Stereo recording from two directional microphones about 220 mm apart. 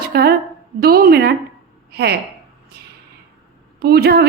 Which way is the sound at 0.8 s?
45° right (ahead or behind).